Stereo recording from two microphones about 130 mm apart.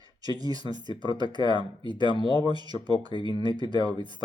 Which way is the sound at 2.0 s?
35° left (ahead or behind).